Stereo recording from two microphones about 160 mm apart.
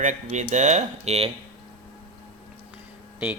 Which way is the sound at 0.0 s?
50° right (ahead or behind).